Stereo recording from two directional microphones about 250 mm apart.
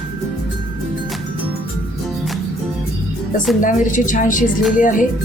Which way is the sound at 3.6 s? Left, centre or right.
Left.